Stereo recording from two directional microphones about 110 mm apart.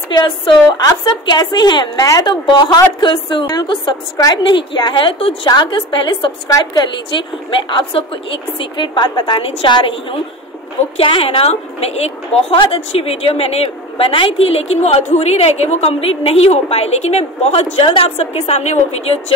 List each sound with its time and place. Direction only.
0.1 s a woman's voice: 40° left (ahead or behind)
7.7 s a woman's voice: 55° left (ahead or behind)
11.0 s a woman's voice: 55° left (ahead or behind)